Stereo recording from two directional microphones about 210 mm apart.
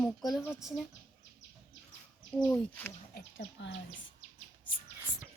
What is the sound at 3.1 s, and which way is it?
Speech, 55° left (ahead or behind).